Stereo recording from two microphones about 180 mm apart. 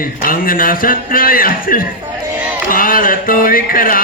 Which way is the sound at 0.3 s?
50° left (ahead or behind).